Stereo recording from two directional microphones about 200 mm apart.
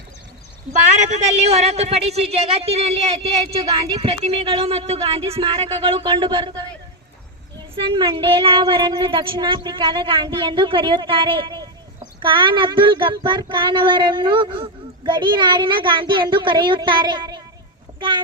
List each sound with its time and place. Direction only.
0.8 s speech: 35° right (ahead or behind)
7.8 s speech: 25° right (ahead or behind)